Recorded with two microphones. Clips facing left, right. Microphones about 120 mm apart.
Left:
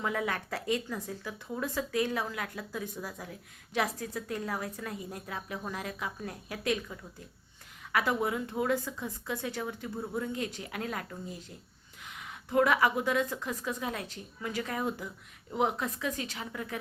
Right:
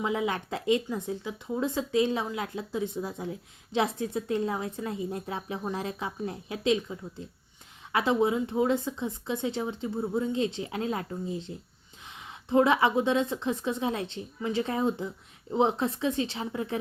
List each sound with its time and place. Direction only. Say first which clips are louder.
0.0 s speech: right 4 dB; 20° right (ahead or behind)
7.9 s speech: right 5 dB; 25° right (ahead or behind)